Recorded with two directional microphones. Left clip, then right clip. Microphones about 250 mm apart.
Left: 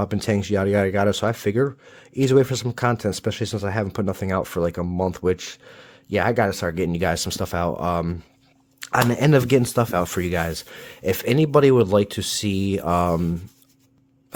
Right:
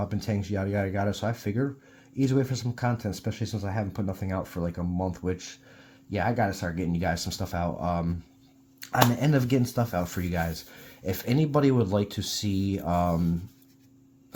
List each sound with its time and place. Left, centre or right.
0.0 s speech: left